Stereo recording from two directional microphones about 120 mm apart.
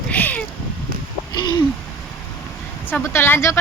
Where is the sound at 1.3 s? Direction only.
40° left (ahead or behind).